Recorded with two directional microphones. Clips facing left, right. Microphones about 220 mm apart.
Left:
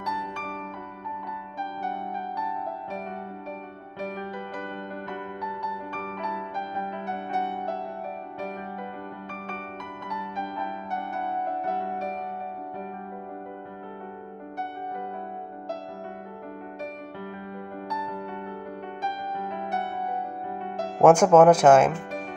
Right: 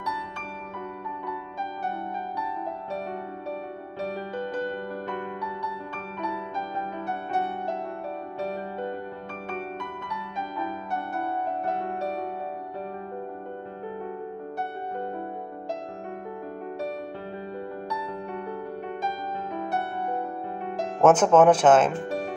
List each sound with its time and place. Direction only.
21.0 s speech: 10° left (ahead or behind)